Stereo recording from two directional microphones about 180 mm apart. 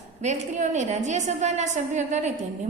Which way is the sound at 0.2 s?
40° right (ahead or behind).